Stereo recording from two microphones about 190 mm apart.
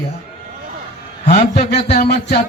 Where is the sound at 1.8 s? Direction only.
55° left (ahead or behind).